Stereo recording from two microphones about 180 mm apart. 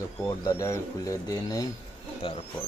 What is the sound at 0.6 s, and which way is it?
Speech, 20° left (ahead or behind).